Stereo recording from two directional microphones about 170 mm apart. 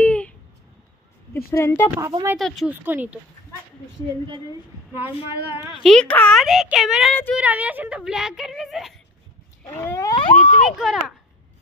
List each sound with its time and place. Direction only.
0.0 s a sound: 5° left (ahead or behind)
1.5 s speech: 15° left (ahead or behind)
2.3 s speech: centre (ahead or behind)
2.7 s speech: 10° right (ahead or behind)
5.7 s speech: centre (ahead or behind)
9.8 s a sound: 20° left (ahead or behind)
10.8 s a child's voice: centre (ahead or behind)